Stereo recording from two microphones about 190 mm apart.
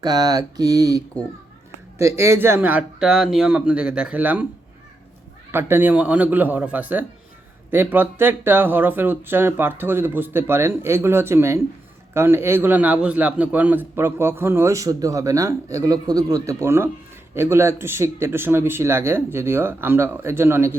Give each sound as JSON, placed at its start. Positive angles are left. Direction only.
{"t": 0.0, "sound": "a man's voice", "side_deg": -20}
{"t": 5.5, "sound": "a man's voice", "side_deg": -10}